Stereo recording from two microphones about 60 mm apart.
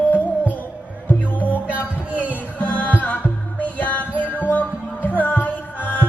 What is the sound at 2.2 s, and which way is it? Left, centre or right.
Music, left.